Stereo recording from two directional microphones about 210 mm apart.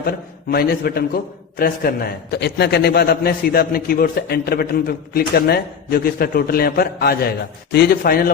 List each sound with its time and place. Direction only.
0.0 s a man's voice: 45° left (ahead or behind)